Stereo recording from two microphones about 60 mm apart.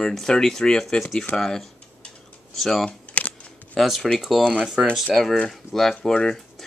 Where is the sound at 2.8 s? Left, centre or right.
Left.